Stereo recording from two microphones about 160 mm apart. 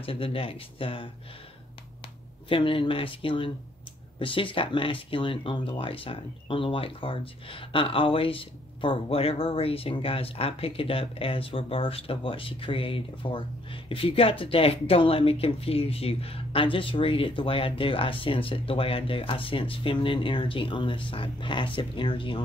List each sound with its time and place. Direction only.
0.0 s speech: 35° left (ahead or behind)
2.5 s speech: 35° left (ahead or behind)